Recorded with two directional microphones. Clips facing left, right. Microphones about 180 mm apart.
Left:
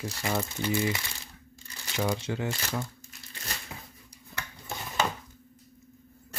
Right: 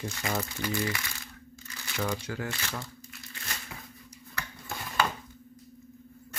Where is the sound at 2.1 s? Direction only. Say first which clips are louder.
Left 3 dB; 25° left (ahead or behind).